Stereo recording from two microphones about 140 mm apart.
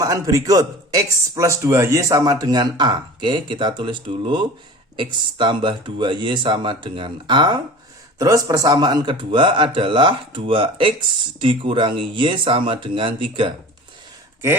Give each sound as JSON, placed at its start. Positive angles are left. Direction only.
{"t": 0.0, "sound": "speech", "side_deg": -25}